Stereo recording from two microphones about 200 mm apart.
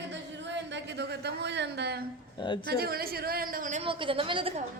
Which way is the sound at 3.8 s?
25° right (ahead or behind).